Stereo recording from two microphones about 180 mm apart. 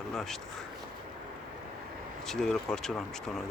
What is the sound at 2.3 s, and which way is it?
Speech, centre (ahead or behind).